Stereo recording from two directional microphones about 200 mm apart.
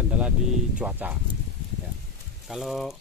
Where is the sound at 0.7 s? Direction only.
5° right (ahead or behind).